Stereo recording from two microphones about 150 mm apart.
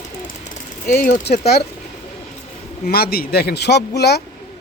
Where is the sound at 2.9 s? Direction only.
90° left.